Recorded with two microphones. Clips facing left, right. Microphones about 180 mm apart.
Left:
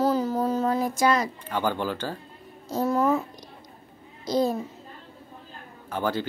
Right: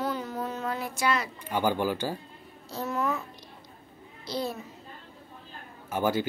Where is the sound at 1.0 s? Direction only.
40° left (ahead or behind).